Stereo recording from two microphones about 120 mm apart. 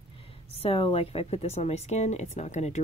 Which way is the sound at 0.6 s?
50° left (ahead or behind).